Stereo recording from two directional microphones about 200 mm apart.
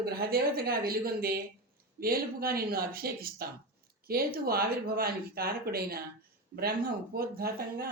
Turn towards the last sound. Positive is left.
turn(degrees=-50)  # may be behind; listen again after turning